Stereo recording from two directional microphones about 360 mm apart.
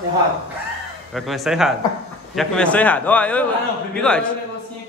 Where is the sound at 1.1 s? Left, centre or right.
Centre.